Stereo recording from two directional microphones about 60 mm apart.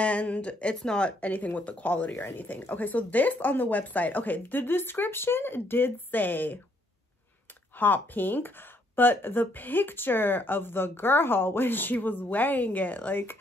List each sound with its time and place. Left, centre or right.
0.0 s speech: left
7.8 s speech: left